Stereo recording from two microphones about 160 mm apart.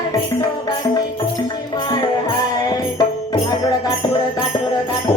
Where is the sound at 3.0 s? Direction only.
25° left (ahead or behind).